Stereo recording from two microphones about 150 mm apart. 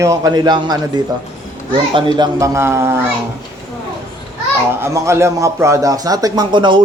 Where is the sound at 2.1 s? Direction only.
30° right (ahead or behind).